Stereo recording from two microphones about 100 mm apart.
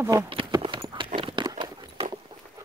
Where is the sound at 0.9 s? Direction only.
55° right (ahead or behind).